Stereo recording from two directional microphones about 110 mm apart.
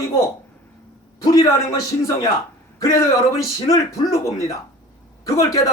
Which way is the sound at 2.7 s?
30° left (ahead or behind).